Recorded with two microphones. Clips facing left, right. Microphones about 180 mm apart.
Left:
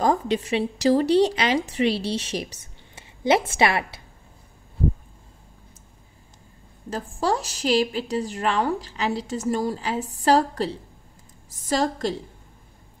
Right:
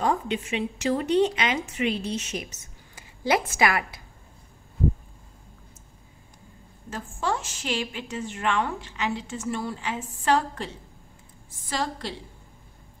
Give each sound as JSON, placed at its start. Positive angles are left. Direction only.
{"t": 0.0, "sound": "speech", "side_deg": 35}
{"t": 6.9, "sound": "speech", "side_deg": 35}